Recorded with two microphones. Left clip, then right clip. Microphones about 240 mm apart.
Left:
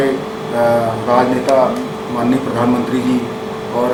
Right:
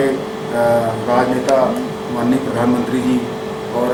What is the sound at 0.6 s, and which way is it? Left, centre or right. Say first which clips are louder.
Speech: left 1 dB; centre.